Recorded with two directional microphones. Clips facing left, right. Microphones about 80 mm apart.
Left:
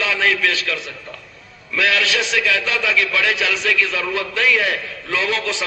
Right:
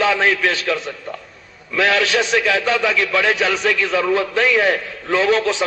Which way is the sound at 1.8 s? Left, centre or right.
Right.